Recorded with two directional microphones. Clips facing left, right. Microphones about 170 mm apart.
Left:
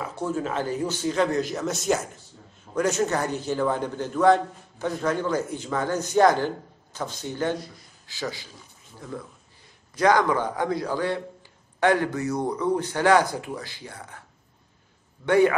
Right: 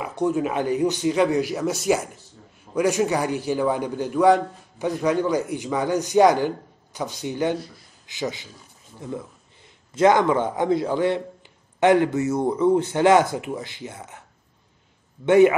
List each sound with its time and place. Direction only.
0.0 s a man's voice: 15° right (ahead or behind)
15.2 s speech: 20° right (ahead or behind)